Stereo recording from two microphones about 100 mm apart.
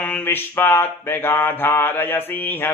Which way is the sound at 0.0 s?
20° left (ahead or behind).